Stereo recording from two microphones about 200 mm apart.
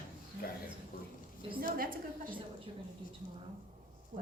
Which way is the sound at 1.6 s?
45° right (ahead or behind).